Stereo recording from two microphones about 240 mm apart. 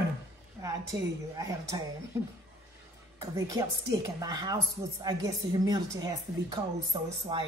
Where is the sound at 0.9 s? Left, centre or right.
Centre.